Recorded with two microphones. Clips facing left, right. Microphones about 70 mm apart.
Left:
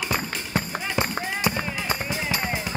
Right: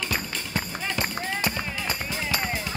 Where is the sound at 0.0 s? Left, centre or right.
Left.